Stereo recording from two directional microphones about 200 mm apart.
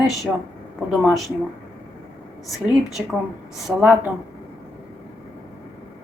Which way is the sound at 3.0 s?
5° right (ahead or behind).